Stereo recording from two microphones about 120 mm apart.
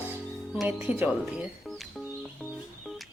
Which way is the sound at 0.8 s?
15° right (ahead or behind).